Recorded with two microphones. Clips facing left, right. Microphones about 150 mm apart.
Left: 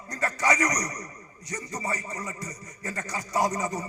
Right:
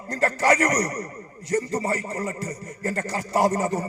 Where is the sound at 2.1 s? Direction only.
55° right (ahead or behind).